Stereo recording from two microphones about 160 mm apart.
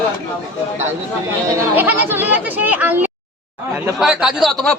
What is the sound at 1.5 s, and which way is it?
A man's voice, 15° right (ahead or behind).